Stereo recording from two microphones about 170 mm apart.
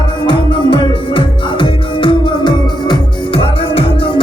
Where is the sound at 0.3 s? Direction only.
25° left (ahead or behind).